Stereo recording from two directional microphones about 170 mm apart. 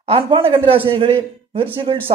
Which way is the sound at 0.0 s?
35° right (ahead or behind).